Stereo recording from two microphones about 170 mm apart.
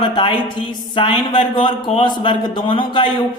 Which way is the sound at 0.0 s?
25° left (ahead or behind).